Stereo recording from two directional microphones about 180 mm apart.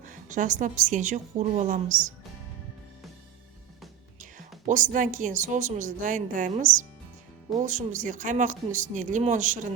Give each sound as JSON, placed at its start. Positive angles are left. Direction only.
{"t": 0.0, "sound": "a woman's voice", "side_deg": -45}
{"t": 4.2, "sound": "a woman's voice", "side_deg": -45}